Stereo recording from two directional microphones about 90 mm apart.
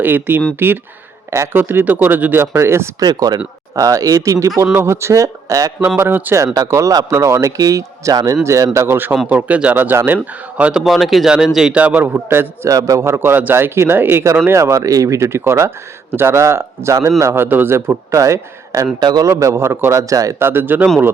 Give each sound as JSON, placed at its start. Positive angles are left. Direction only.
{"t": 0.0, "sound": "speech", "side_deg": -20}
{"t": 3.0, "sound": "a man's voice", "side_deg": -45}
{"t": 6.0, "sound": "speech", "side_deg": -20}
{"t": 6.3, "sound": "a man's voice", "side_deg": -35}
{"t": 10.6, "sound": "a man's voice", "side_deg": -10}
{"t": 11.7, "sound": "speech", "side_deg": -15}
{"t": 12.6, "sound": "a man's voice", "side_deg": -40}
{"t": 19.3, "sound": "a man's voice", "side_deg": -35}
{"t": 20.4, "sound": "speech", "side_deg": -25}